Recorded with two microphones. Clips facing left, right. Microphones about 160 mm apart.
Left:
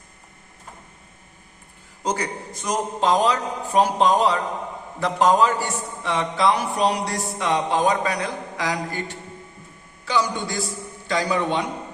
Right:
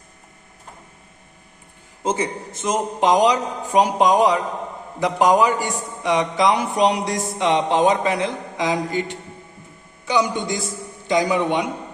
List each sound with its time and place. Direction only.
2.0 s a man's voice: 25° right (ahead or behind)